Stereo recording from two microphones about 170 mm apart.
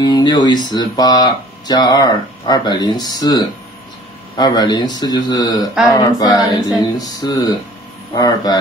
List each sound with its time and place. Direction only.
0.0 s speech: 25° left (ahead or behind)